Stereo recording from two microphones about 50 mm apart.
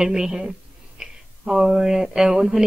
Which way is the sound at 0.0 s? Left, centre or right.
Centre.